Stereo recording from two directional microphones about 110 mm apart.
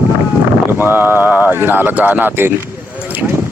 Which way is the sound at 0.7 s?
20° right (ahead or behind).